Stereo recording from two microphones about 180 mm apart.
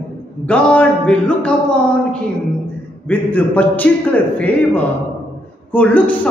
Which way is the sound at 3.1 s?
10° left (ahead or behind).